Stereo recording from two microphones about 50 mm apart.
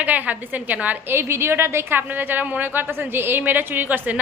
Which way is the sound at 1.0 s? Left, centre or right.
Right.